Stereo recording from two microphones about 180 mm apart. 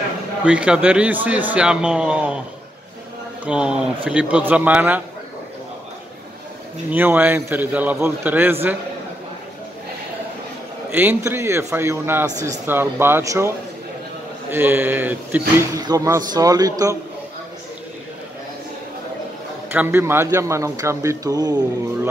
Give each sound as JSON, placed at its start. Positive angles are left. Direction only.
{"t": 0.5, "sound": "speech", "side_deg": -5}
{"t": 3.4, "sound": "speech", "side_deg": -5}
{"t": 6.9, "sound": "speech", "side_deg": -10}
{"t": 10.9, "sound": "speech", "side_deg": -10}
{"t": 14.5, "sound": "a man's voice", "side_deg": -10}
{"t": 19.7, "sound": "speech", "side_deg": -10}